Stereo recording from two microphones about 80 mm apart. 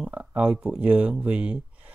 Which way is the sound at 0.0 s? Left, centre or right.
Centre.